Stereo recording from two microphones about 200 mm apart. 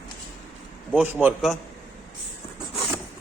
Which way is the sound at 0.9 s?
10° right (ahead or behind).